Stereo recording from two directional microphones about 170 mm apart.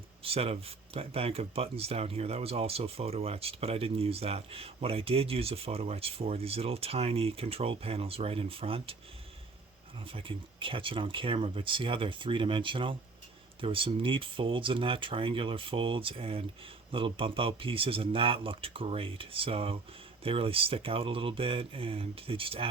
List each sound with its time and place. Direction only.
0.2 s speech: 35° right (ahead or behind)
10.0 s speech: 30° right (ahead or behind)